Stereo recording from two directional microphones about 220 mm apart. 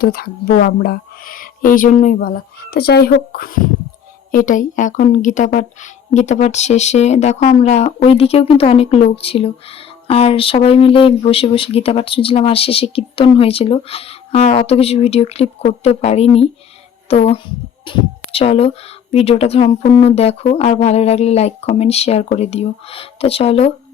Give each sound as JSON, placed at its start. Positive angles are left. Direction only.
{"t": 0.0, "sound": "speech", "side_deg": 45}